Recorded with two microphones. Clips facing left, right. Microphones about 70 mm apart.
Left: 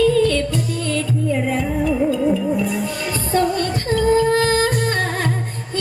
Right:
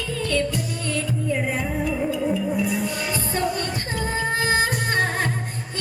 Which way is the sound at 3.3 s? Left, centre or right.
Right.